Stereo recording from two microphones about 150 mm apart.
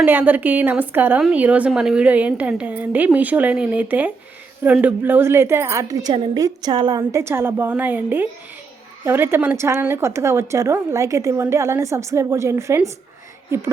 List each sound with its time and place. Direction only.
0.0 s a woman's voice: 10° right (ahead or behind)